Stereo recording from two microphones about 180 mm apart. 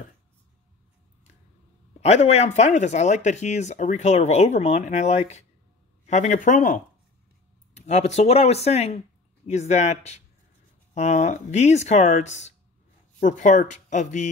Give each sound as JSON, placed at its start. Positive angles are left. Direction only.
{"t": 2.0, "sound": "speech", "side_deg": 40}